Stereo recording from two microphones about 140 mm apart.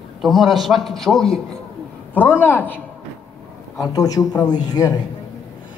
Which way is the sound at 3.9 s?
25° left (ahead or behind).